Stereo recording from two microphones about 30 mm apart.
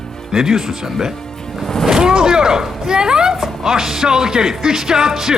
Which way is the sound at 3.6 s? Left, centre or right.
Centre.